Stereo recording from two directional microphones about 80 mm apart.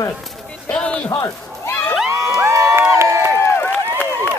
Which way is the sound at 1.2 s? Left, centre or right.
Left.